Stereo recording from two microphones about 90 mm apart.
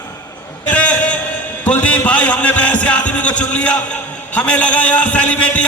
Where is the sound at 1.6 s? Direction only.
15° left (ahead or behind).